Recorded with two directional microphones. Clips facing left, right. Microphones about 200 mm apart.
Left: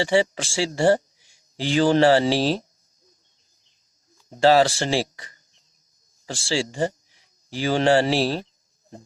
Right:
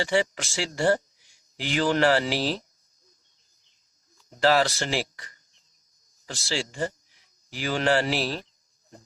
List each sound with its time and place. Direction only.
0.0 s speech: 30° left (ahead or behind)
4.3 s speech: 30° left (ahead or behind)